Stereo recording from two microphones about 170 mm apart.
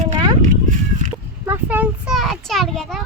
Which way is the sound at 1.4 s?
10° right (ahead or behind).